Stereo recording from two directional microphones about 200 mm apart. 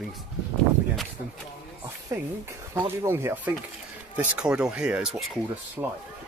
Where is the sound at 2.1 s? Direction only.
15° right (ahead or behind).